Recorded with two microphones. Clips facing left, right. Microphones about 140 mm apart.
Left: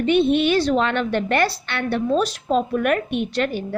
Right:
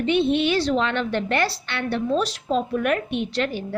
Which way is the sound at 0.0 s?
50° left (ahead or behind).